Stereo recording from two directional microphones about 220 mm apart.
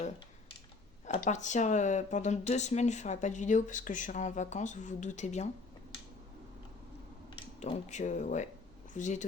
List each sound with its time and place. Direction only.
1.2 s speech: 35° left (ahead or behind)
7.3 s speech: 30° left (ahead or behind)